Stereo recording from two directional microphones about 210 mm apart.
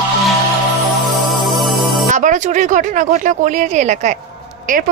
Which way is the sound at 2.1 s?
35° right (ahead or behind).